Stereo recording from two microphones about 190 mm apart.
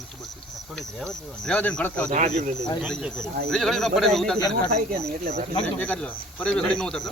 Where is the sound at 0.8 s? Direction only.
5° left (ahead or behind).